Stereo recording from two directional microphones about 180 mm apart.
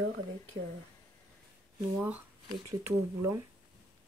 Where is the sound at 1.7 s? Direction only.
10° right (ahead or behind).